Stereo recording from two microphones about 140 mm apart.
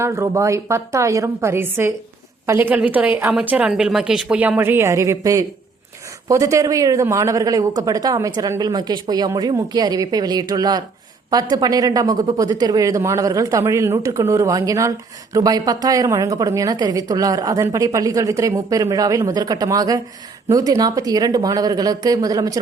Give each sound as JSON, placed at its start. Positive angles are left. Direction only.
{"t": 0.0, "sound": "a woman's voice", "side_deg": -20}